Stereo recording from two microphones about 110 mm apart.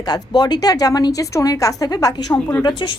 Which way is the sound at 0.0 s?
35° left (ahead or behind).